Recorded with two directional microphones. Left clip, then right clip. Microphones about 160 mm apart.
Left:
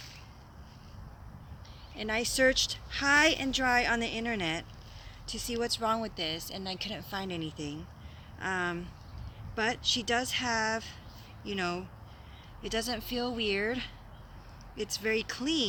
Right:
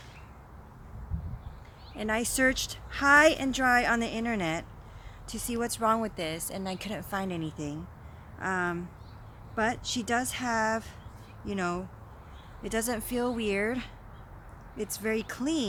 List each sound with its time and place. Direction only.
2.0 s speech: 60° right (ahead or behind)
5.6 s speech: 60° right (ahead or behind); by 11.8 s 45° right (ahead or behind)
12.6 s speech: 55° right (ahead or behind)